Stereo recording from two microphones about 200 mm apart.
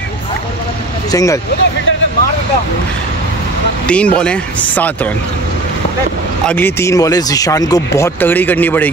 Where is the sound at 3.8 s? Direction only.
5° left (ahead or behind).